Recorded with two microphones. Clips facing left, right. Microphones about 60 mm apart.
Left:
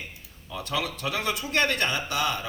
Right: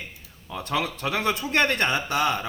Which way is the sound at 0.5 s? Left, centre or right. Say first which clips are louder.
Right 3 dB; right.